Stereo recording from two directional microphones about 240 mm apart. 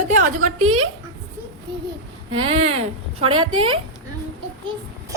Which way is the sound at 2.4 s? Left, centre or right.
Right.